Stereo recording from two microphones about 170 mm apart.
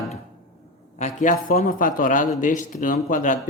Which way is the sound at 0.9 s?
45° left (ahead or behind).